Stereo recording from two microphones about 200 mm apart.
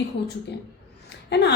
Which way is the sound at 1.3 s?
60° left (ahead or behind).